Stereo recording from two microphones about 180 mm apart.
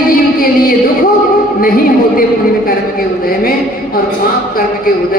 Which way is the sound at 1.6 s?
55° left (ahead or behind).